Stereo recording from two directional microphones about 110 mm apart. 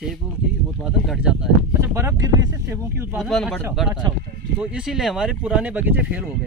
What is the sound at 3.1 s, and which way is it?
Speech, centre (ahead or behind).